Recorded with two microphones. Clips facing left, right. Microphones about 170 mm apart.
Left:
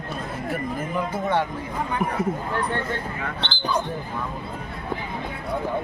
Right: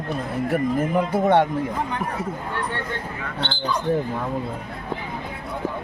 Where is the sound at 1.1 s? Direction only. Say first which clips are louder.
Right 7 dB; 65° right (ahead or behind).